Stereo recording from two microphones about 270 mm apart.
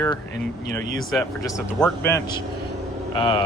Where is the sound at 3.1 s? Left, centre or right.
Centre.